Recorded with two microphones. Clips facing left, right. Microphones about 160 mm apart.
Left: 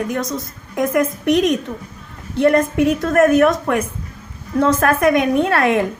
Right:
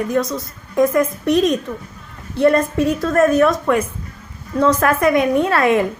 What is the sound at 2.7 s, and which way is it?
Speech, 20° left (ahead or behind).